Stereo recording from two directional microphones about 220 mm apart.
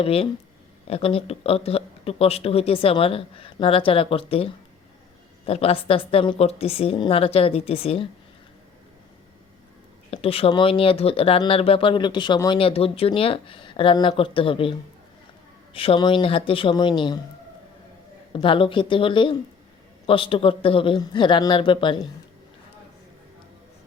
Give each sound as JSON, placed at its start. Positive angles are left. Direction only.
{"t": 0.0, "sound": "speech", "side_deg": 25}
{"t": 5.5, "sound": "speech", "side_deg": 25}
{"t": 10.1, "sound": "speech", "side_deg": 25}
{"t": 18.3, "sound": "speech", "side_deg": 25}